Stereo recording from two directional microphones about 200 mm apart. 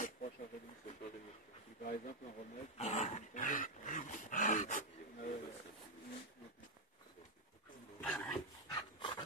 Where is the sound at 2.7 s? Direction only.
35° left (ahead or behind).